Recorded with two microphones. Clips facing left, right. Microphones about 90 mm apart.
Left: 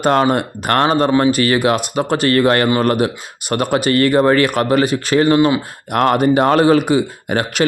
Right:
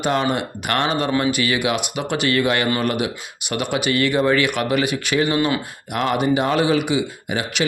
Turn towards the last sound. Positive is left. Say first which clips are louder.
# left 6 dB
turn(degrees=45)  # may be behind; listen again after turning